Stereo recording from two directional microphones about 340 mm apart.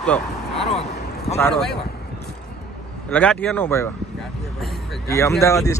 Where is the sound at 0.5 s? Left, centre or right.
Centre.